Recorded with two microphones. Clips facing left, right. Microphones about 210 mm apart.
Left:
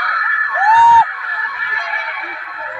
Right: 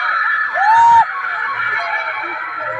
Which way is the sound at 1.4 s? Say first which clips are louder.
Right 3 dB; 60° right (ahead or behind).